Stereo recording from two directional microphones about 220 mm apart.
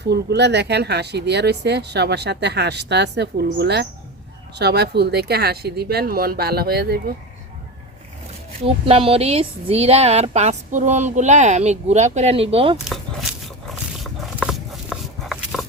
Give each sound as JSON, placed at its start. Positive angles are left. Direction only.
{"t": 0.0, "sound": "speech", "side_deg": -50}
{"t": 8.6, "sound": "speech", "side_deg": -25}
{"t": 12.7, "sound": "a sound", "side_deg": 0}